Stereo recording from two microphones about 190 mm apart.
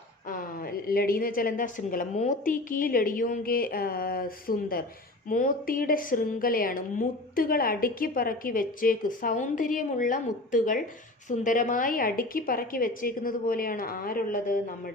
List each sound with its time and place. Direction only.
0.3 s a woman's voice: 50° left (ahead or behind)